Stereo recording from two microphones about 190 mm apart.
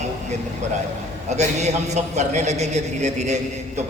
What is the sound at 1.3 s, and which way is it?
A man's voice, 35° right (ahead or behind).